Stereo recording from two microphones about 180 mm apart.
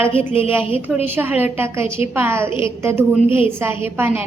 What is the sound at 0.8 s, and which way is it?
A woman's voice, 10° right (ahead or behind).